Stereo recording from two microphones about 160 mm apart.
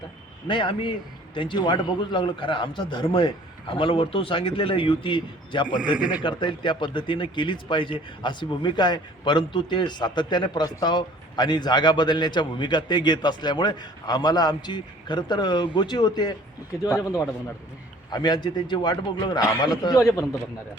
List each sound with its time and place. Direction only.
0.4 s a man's voice: 30° left (ahead or behind)
5.6 s speech: 5° right (ahead or behind)
6.2 s speech: 30° left (ahead or behind)